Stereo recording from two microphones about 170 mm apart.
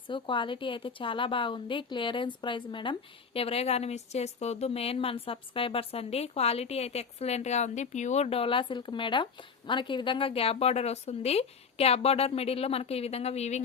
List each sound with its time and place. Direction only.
0.1 s a woman's voice: 30° left (ahead or behind)